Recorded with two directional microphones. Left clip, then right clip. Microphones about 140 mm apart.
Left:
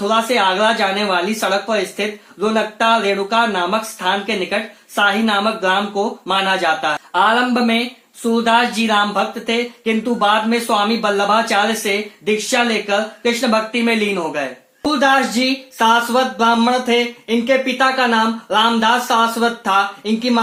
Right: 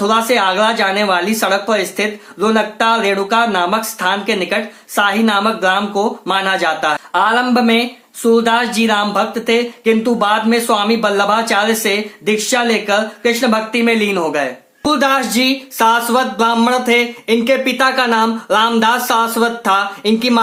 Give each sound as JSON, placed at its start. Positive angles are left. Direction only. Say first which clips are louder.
{"t": 0.1, "sound": "speech", "louder": "even", "side_deg": -15}
{"t": 14.8, "sound": "speech", "louder": "right 1 dB", "side_deg": -30}